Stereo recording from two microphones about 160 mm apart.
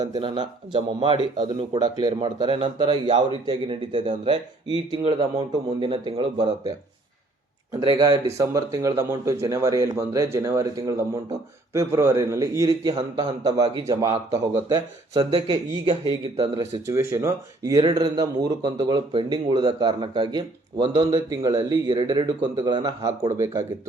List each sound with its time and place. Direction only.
0.0 s speech: 25° right (ahead or behind)
5.5 s speech: 30° right (ahead or behind)
7.9 s speech: 20° right (ahead or behind)
16.8 s speech: 15° right (ahead or behind); by 21.1 s 35° right (ahead or behind)
21.1 s speech: 20° right (ahead or behind)